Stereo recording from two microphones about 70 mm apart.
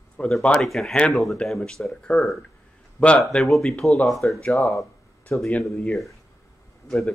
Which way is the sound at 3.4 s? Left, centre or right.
Centre.